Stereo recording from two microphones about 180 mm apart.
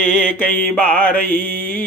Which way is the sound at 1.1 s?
50° left (ahead or behind).